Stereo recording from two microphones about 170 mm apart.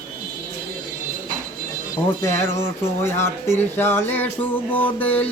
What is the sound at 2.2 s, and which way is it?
Music, 15° left (ahead or behind).